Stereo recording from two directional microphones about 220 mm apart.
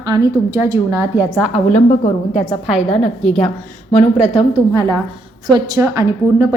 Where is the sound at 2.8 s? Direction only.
30° left (ahead or behind).